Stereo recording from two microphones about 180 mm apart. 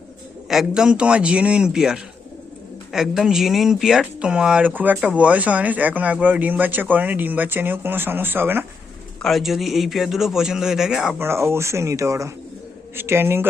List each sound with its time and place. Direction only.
0.4 s a man's voice: centre (ahead or behind)
9.2 s a man's voice: centre (ahead or behind)
11.3 s speech: 15° right (ahead or behind)